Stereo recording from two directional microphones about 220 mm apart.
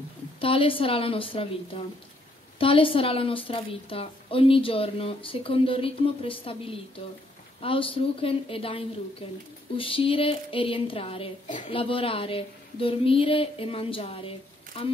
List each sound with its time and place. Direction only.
0.4 s speech: 25° left (ahead or behind)